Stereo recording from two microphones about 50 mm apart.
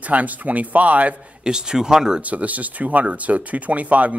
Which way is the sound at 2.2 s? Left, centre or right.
Right.